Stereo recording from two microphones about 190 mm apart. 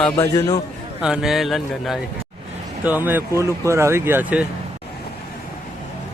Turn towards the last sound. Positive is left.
turn(degrees=-10)  # may be behind; listen again after turning